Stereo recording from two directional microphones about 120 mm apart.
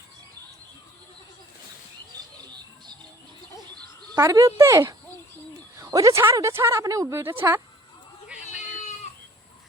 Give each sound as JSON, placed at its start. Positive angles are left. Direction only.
{"t": 4.1, "sound": "a woman's voice", "side_deg": -30}